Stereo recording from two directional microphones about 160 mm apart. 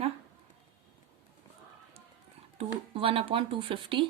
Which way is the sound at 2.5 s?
35° right (ahead or behind).